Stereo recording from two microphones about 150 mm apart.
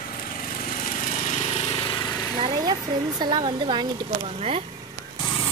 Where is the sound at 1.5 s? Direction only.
35° left (ahead or behind).